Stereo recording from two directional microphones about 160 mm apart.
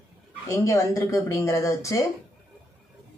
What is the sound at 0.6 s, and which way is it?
Speech, 20° left (ahead or behind).